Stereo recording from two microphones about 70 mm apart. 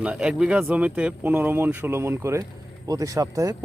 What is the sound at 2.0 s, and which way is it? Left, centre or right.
Speech, right.